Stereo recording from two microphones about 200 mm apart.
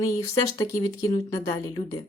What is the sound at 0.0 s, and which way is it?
Speech, 15° left (ahead or behind).